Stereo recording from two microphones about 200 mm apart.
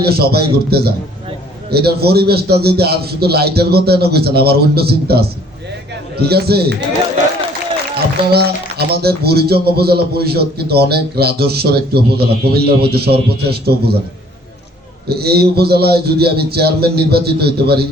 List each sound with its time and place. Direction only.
0.0 s speech: 50° right (ahead or behind)
8.3 s speech: 50° right (ahead or behind)
15.1 s speech: 50° right (ahead or behind)